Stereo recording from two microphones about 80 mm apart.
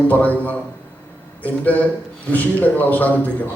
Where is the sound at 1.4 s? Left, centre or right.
Centre.